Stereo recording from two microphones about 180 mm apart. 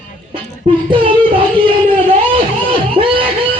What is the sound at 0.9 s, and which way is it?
Child singing, 30° right (ahead or behind).